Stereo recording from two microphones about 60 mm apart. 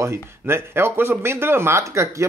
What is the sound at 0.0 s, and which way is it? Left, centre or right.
Speech, right.